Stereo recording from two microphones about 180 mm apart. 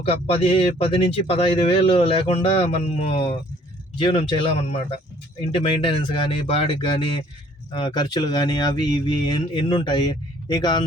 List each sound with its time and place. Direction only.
0.0 s speech: 30° left (ahead or behind)